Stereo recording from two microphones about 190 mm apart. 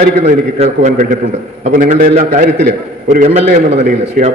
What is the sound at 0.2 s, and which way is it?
A man's voice, 35° right (ahead or behind).